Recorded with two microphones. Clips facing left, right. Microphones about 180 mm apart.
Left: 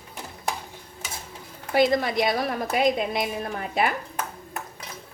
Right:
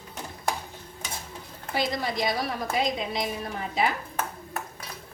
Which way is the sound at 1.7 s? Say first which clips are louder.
Left 7 dB; 60° left (ahead or behind).